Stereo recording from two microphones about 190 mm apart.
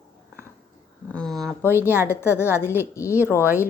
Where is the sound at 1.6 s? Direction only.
10° right (ahead or behind).